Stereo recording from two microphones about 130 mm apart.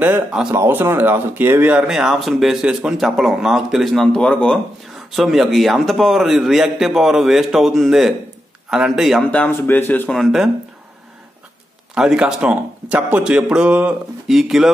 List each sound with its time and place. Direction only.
0.0 s a man's voice: 10° right (ahead or behind)
9.3 s speech: 15° left (ahead or behind)
10.1 s speech: centre (ahead or behind)
11.9 s a man's voice: 5° right (ahead or behind)